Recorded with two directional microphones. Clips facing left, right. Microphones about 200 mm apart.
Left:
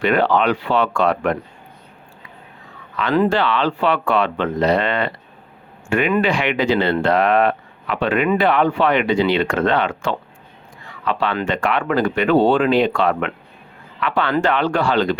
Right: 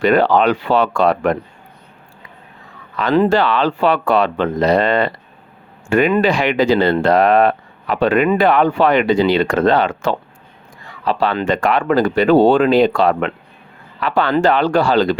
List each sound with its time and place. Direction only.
0.0 s speech: 40° right (ahead or behind)
3.2 s speech: 40° right (ahead or behind)